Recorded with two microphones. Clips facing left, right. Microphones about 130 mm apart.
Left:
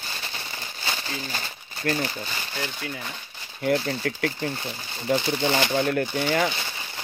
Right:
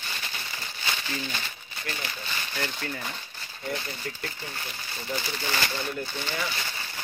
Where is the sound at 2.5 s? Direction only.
5° left (ahead or behind).